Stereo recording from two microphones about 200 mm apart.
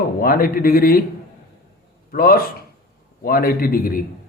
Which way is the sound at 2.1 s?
45° left (ahead or behind).